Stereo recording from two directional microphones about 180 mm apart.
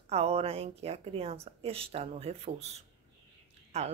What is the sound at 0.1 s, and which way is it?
Speech, 35° right (ahead or behind).